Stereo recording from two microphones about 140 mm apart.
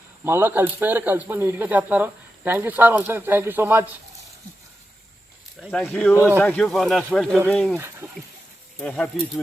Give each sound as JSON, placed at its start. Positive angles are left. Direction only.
{"t": 0.3, "sound": "speech", "side_deg": -15}
{"t": 5.8, "sound": "speech", "side_deg": 10}
{"t": 7.8, "sound": "speech", "side_deg": -20}
{"t": 8.8, "sound": "speech", "side_deg": 5}